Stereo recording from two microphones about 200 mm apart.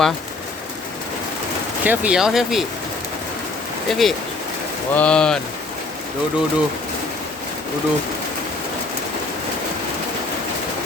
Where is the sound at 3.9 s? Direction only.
Centre (ahead or behind).